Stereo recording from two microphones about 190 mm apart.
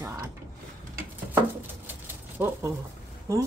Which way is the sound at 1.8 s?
10° right (ahead or behind).